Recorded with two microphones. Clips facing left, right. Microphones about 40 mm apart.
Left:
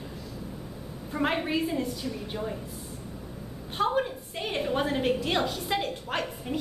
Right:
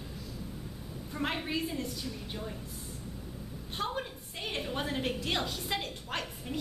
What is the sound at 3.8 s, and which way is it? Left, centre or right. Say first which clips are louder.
A woman's voice: left 9 dB; centre.